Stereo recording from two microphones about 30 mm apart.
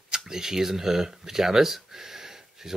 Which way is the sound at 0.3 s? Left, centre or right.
Centre.